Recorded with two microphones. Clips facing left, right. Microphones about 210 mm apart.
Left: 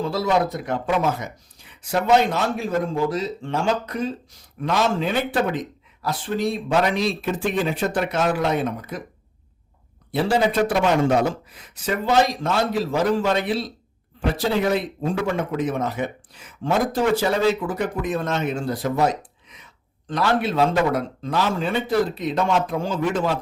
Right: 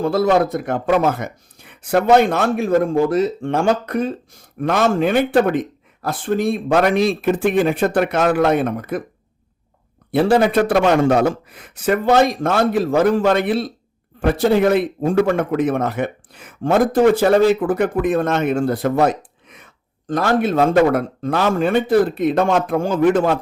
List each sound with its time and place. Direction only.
0.0 s speech: 55° right (ahead or behind)
10.1 s a man's voice: 55° right (ahead or behind)